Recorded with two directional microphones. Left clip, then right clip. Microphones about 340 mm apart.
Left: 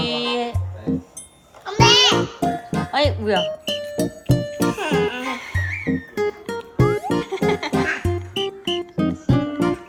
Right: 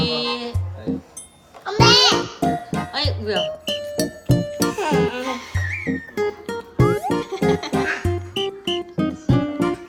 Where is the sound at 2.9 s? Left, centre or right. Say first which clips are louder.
Left 5 dB; centre.